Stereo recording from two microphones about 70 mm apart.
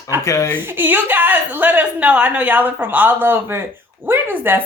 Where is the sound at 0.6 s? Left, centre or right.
Right.